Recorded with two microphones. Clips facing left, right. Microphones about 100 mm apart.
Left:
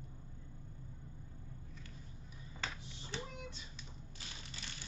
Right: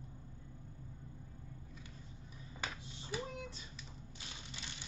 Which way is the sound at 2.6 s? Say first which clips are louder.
Even; 15° right (ahead or behind).